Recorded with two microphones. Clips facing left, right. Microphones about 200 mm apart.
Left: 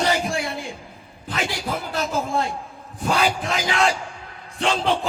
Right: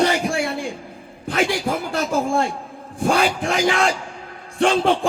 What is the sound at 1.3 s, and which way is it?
Music, 50° right (ahead or behind).